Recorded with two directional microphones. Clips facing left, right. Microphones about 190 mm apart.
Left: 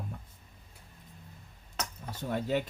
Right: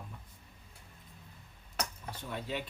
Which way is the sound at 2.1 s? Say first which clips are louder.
Left 11 dB; 45° left (ahead or behind).